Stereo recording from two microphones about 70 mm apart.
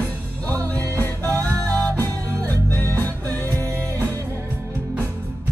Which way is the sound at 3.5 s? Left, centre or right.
Right.